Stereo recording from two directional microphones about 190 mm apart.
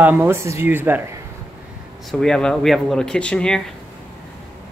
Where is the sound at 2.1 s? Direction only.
5° left (ahead or behind).